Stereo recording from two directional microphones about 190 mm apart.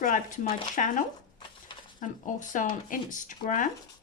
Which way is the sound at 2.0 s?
40° left (ahead or behind).